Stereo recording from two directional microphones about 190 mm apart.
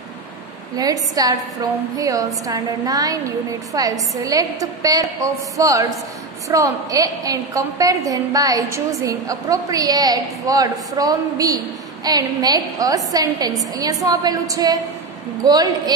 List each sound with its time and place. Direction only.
0.7 s a woman's voice: 20° right (ahead or behind)